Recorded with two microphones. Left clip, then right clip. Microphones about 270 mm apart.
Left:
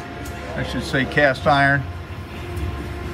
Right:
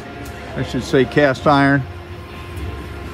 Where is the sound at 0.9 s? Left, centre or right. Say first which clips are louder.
Right 3 dB; right.